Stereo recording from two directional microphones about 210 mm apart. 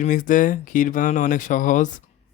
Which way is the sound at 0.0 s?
40° left (ahead or behind).